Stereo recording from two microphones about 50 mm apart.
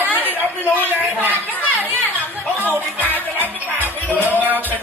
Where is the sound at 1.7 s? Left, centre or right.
Right.